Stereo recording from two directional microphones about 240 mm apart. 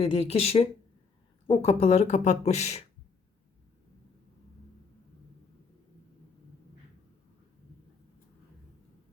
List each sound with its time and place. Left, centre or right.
0.0 s speech: left